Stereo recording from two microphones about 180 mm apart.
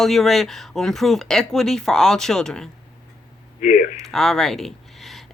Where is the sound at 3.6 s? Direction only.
45° left (ahead or behind).